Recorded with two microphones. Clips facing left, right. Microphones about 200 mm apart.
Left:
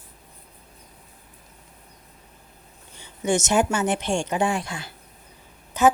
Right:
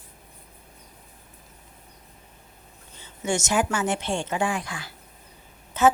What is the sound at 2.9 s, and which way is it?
A woman's voice, 15° left (ahead or behind).